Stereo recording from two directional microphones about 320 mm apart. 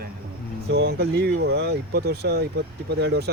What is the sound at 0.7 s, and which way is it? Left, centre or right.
Speech, right.